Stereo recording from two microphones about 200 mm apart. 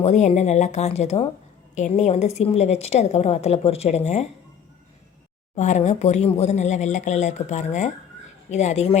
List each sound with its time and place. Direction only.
0.0 s a woman's voice: 35° left (ahead or behind)
5.5 s a woman's voice: 35° left (ahead or behind)